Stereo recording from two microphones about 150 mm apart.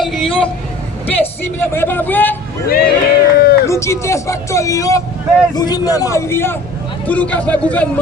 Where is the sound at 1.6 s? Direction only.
15° left (ahead or behind).